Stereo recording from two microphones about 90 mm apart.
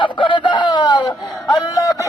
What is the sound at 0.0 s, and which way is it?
Chicken, 65° left (ahead or behind).